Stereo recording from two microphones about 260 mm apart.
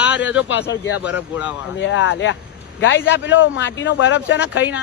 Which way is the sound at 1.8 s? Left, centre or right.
Left.